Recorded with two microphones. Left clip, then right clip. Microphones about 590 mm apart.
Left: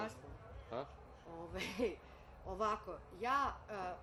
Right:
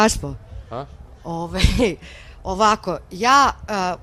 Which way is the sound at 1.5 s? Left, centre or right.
Right.